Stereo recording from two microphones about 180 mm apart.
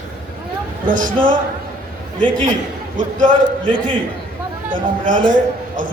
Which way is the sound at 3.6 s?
30° right (ahead or behind).